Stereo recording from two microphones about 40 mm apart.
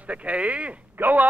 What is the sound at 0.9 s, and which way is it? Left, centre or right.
Speech, right.